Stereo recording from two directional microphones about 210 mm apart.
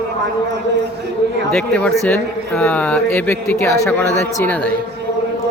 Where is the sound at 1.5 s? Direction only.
5° left (ahead or behind).